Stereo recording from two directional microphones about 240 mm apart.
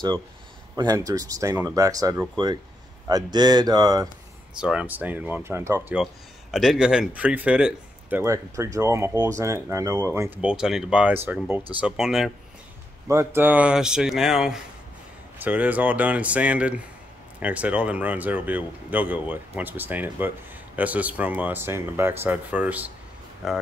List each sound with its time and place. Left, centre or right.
0.7 s speech: centre
4.6 s speech: centre